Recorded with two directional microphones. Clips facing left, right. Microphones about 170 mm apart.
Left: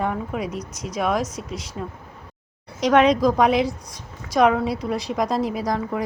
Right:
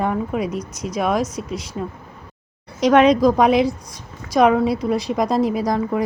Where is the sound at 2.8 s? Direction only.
5° right (ahead or behind).